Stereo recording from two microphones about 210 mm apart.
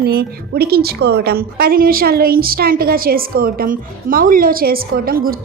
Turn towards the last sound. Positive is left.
turn(degrees=-45)  # may be behind; listen again after turning